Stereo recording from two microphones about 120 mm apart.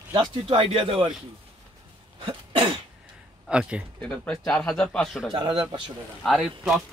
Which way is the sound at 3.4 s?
10° right (ahead or behind).